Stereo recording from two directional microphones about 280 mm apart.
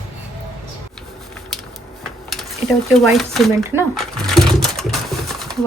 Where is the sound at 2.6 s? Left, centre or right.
Centre.